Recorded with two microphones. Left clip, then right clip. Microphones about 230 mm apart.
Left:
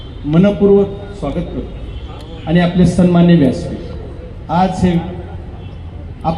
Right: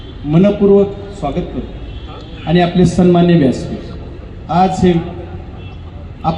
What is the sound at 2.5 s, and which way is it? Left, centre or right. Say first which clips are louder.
Speech: right 2 dB; right.